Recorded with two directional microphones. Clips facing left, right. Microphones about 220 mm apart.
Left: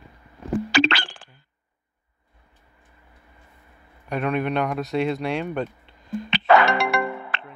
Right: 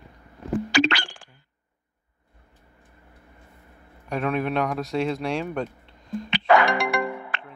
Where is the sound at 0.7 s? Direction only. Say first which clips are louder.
Even; 15° right (ahead or behind).